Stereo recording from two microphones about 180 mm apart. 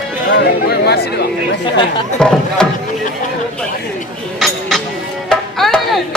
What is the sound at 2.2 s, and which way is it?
Speech, 5° left (ahead or behind).